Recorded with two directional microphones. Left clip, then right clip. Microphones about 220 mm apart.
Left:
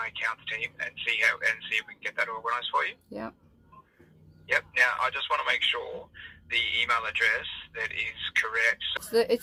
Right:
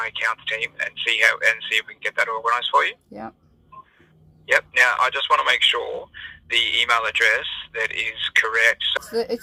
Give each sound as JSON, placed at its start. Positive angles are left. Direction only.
{"t": 0.0, "sound": "a man's voice", "side_deg": -55}
{"t": 3.1, "sound": "speech", "side_deg": 0}
{"t": 4.4, "sound": "a man's voice", "side_deg": -55}
{"t": 9.1, "sound": "speech", "side_deg": -5}